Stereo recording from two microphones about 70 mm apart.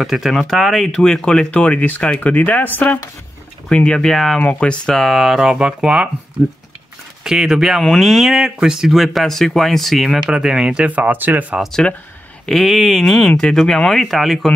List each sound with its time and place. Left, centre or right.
0.0 s speech: centre
4.4 s speech: centre
4.8 s speech: centre
7.2 s speech: centre
10.9 s speech: right
11.8 s speech: centre